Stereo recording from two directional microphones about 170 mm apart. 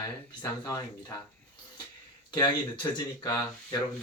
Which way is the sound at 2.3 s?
25° left (ahead or behind).